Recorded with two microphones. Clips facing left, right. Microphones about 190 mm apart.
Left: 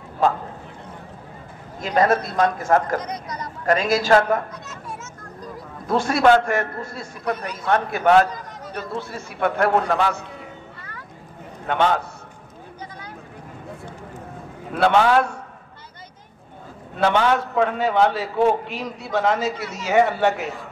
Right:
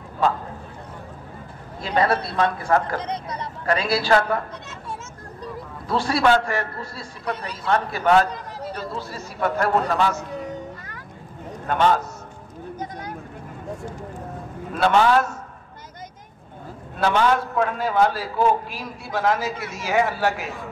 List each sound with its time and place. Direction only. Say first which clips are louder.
1.8 s a man's voice: left 2 dB; 45° left (ahead or behind)
3.0 s speech: right 1 dB; 30° right (ahead or behind)
3.6 s a man's voice: left 3 dB; 45° left (ahead or behind)
5.9 s a man's voice: left 3 dB; 45° left (ahead or behind)
8.7 s a man's voice: left 6 dB; 60° left (ahead or behind)
11.6 s a man's voice: right 1 dB; 60° left (ahead or behind)
14.7 s a man's voice: left 1 dB; 60° left (ahead or behind)
17.0 s a man's voice: left 1 dB; 60° left (ahead or behind)